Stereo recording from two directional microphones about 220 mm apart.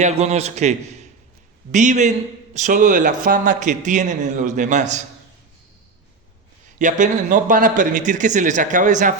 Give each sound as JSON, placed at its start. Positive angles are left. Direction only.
{"t": 0.0, "sound": "a man's voice", "side_deg": -30}
{"t": 6.7, "sound": "a man's voice", "side_deg": -35}